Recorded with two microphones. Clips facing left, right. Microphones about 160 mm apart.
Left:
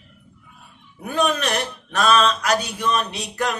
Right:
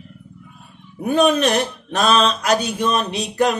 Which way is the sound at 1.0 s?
25° right (ahead or behind).